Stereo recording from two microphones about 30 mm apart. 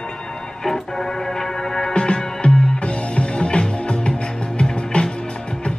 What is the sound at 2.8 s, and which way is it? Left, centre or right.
Music, left.